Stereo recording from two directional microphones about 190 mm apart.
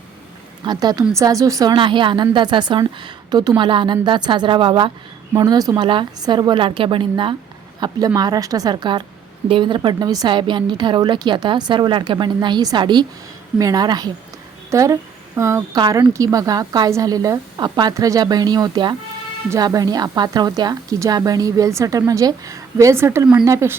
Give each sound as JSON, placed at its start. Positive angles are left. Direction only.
{"t": 0.6, "sound": "a woman's voice", "side_deg": -20}